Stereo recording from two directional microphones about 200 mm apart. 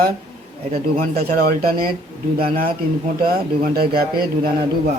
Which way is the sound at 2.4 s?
50° right (ahead or behind).